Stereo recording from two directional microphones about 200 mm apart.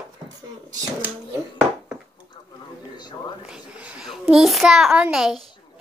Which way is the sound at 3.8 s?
5° right (ahead or behind).